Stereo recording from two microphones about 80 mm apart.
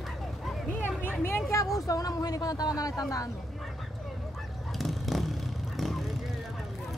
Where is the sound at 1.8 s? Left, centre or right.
Left.